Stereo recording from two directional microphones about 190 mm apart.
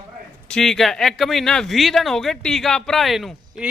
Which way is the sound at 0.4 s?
5° left (ahead or behind).